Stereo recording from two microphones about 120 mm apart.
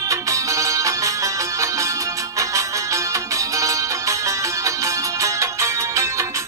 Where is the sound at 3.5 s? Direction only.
25° right (ahead or behind).